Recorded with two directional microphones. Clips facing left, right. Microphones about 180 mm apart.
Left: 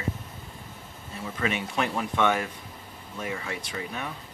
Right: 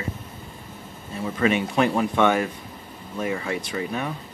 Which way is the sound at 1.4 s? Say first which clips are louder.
Right 8 dB; 55° right (ahead or behind).